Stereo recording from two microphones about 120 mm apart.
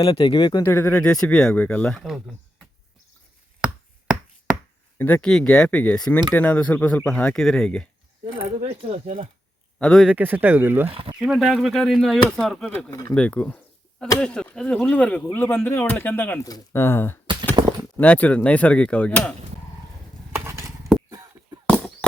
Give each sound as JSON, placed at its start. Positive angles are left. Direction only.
{"t": 0.1, "sound": "speech", "side_deg": 50}
{"t": 0.6, "sound": "speech", "side_deg": 15}
{"t": 2.0, "sound": "speech", "side_deg": 0}
{"t": 3.6, "sound": "a sound", "side_deg": -10}
{"t": 4.9, "sound": "speech", "side_deg": 15}
{"t": 8.6, "sound": "speech", "side_deg": -50}
{"t": 9.7, "sound": "speech", "side_deg": 5}
{"t": 10.2, "sound": "speech", "side_deg": -15}
{"t": 11.2, "sound": "speech", "side_deg": -5}
{"t": 12.9, "sound": "speech", "side_deg": 30}
{"t": 13.1, "sound": "speech", "side_deg": 10}
{"t": 17.5, "sound": "a sound", "side_deg": -40}
{"t": 17.9, "sound": "speech", "side_deg": 15}
{"t": 20.3, "sound": "a sound", "side_deg": -20}